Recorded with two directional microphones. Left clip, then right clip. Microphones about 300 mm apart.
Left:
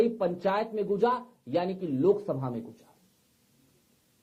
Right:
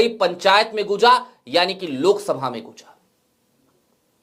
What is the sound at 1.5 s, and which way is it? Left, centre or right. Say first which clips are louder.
Speech: right 11 dB; centre.